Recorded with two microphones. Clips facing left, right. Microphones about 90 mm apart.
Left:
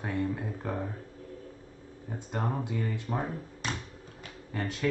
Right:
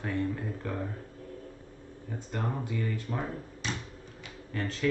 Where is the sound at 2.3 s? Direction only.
20° left (ahead or behind).